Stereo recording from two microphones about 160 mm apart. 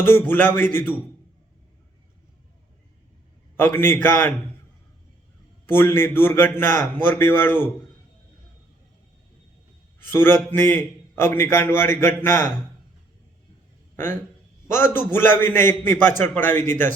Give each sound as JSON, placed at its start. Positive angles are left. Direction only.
{"t": 0.0, "sound": "a man's voice", "side_deg": 15}
{"t": 3.6, "sound": "a man's voice", "side_deg": 15}
{"t": 5.6, "sound": "a man's voice", "side_deg": 15}
{"t": 10.1, "sound": "a man's voice", "side_deg": 15}
{"t": 13.9, "sound": "a man's voice", "side_deg": 15}